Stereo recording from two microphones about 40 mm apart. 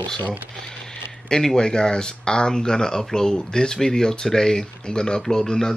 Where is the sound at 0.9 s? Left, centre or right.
Centre.